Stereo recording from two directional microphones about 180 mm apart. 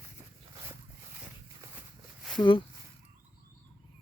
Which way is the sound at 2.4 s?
25° left (ahead or behind).